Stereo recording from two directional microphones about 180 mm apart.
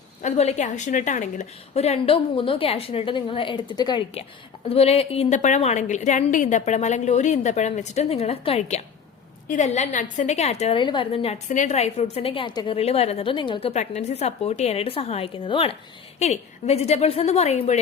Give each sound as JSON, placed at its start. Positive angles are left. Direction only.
{"t": 0.2, "sound": "a woman's voice", "side_deg": 40}